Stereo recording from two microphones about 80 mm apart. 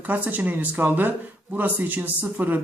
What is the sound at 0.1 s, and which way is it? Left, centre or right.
Speech, right.